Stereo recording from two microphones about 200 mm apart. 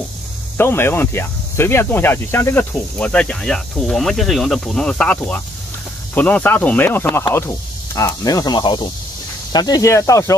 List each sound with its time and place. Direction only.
0.6 s speech: 10° left (ahead or behind)